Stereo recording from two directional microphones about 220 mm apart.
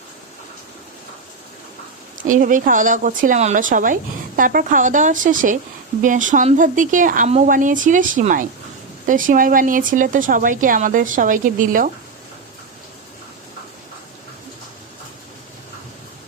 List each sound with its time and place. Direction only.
2.2 s speech: 35° right (ahead or behind)